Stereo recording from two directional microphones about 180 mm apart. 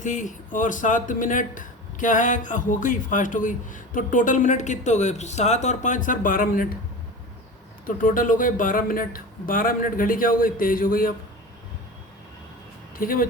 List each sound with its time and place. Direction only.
0.0 s speech: 45° left (ahead or behind)
7.9 s speech: 50° left (ahead or behind)
13.0 s speech: 50° left (ahead or behind)